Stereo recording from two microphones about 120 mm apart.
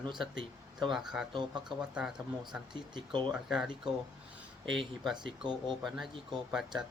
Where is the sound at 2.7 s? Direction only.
40° right (ahead or behind).